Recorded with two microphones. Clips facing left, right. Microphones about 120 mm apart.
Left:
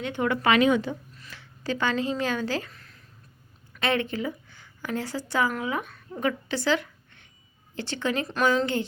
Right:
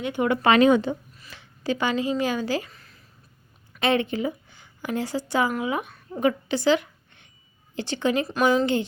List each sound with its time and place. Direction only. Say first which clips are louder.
0.0 s speech: right 3 dB; 15° right (ahead or behind)
0.4 s speech: right 4 dB; 35° right (ahead or behind)
1.3 s speech: right 3 dB; 15° right (ahead or behind)
3.8 s a woman's voice: right 4 dB; 20° right (ahead or behind)